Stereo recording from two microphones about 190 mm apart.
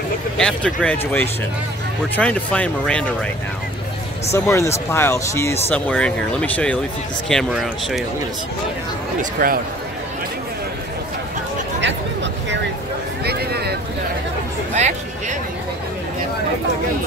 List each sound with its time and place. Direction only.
0.4 s speech: 5° left (ahead or behind)
4.3 s speech: 15° left (ahead or behind)
9.2 s speech: 50° right (ahead or behind)
11.8 s a sound: 70° right (ahead or behind)
13.2 s a sound: 55° right (ahead or behind)
14.8 s chatter: 40° right (ahead or behind)